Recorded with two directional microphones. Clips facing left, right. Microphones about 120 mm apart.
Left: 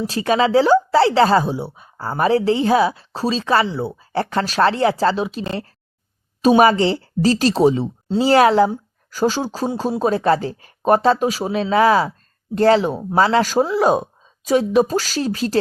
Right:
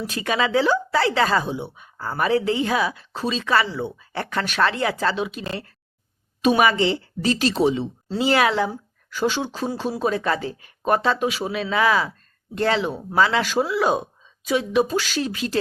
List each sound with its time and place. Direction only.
0.0 s speech: 30° left (ahead or behind)
8.0 s speech: 25° left (ahead or behind)
8.3 s speech: 40° left (ahead or behind)